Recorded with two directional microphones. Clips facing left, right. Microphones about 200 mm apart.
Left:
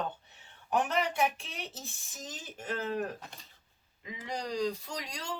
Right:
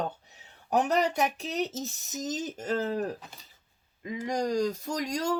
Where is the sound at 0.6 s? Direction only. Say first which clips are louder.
Right 5 dB; 40° right (ahead or behind).